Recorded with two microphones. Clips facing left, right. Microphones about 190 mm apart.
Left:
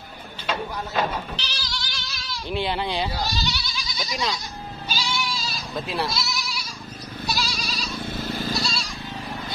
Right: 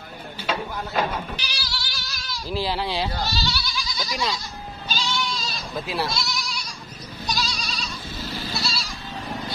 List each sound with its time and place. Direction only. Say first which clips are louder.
1.3 s bleat: even; 10° right (ahead or behind)
3.1 s goat: even; 15° left (ahead or behind)
4.1 s speech: even; centre (ahead or behind)
4.8 s goat: right 1 dB; 10° left (ahead or behind)
8.0 s goat: left 7 dB; 55° left (ahead or behind)
8.6 s goat: left 1 dB; centre (ahead or behind)